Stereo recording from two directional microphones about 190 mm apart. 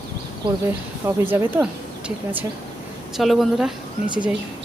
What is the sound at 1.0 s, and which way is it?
A woman's voice, 10° right (ahead or behind).